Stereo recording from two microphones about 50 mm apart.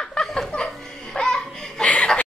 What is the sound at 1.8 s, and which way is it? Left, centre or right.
Chuckle, left.